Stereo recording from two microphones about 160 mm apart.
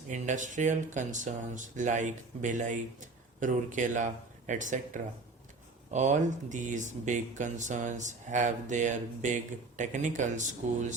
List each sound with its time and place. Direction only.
0.1 s speech: 50° right (ahead or behind)
5.9 s speech: 50° right (ahead or behind)